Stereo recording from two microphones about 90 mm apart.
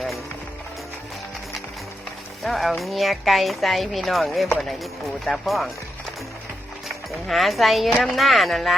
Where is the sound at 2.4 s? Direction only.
Centre (ahead or behind).